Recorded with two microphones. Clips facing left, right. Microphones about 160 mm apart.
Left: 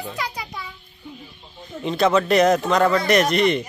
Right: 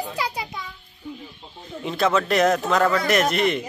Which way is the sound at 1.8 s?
Centre (ahead or behind).